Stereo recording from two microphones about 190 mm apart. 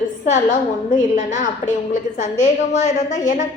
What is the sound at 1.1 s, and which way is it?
A woman's voice, 40° left (ahead or behind).